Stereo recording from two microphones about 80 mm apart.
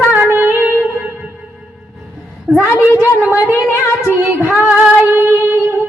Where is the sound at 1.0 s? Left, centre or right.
Centre.